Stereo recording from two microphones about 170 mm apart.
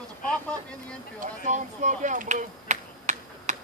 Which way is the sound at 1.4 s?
45° right (ahead or behind).